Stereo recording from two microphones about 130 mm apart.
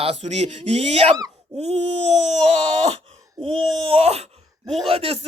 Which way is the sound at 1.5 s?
50° right (ahead or behind).